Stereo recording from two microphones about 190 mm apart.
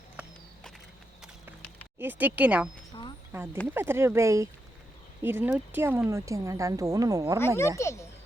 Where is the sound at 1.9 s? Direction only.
10° right (ahead or behind).